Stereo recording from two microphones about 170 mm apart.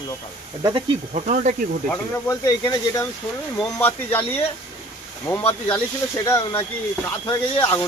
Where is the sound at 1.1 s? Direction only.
45° right (ahead or behind).